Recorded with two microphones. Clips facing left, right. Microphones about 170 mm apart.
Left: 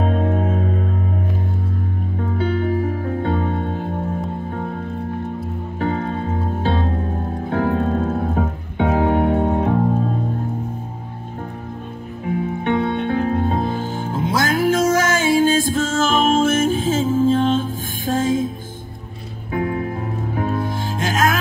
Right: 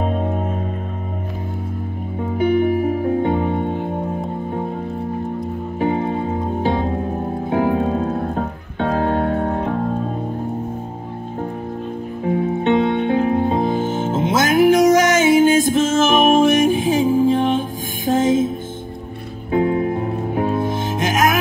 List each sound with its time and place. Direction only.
0.0 s music: 5° right (ahead or behind)
2.1 s music: 15° right (ahead or behind)
5.8 s music: 15° right (ahead or behind); by 8.5 s centre (ahead or behind)
8.7 s music: 15° left (ahead or behind)
12.6 s music: 20° right (ahead or behind)
19.5 s music: 25° right (ahead or behind)